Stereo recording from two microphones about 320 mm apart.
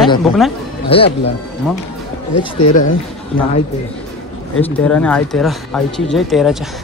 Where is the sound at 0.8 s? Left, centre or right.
Centre.